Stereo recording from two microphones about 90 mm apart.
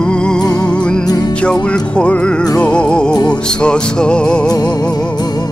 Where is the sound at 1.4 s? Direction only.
10° left (ahead or behind).